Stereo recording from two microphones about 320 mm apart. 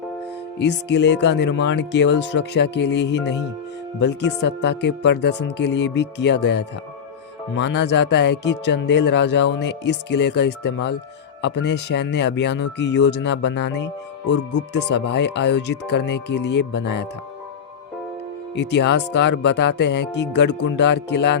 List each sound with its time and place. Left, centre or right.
0.6 s speech: left
18.5 s speech: left